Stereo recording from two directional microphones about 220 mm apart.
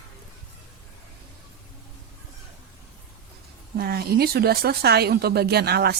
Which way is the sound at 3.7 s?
45° right (ahead or behind).